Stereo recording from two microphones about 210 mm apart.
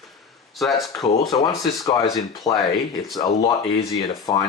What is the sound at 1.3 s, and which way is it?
Speech, 20° left (ahead or behind).